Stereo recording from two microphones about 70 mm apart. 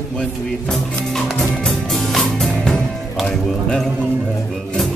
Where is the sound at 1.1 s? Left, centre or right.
Centre.